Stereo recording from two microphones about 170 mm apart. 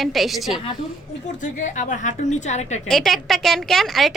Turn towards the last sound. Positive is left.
turn(degrees=0)  # may be behind; listen again after turning